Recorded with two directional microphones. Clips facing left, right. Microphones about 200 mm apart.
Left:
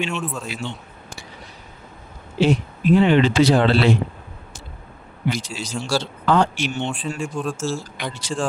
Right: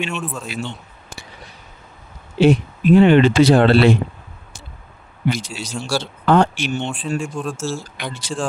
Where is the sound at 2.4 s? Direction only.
55° right (ahead or behind).